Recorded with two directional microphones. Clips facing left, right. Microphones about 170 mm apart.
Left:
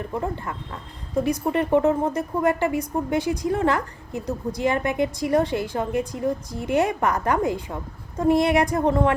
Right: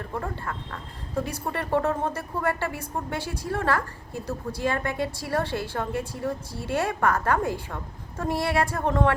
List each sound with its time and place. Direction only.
0.0 s a woman's voice: 20° left (ahead or behind)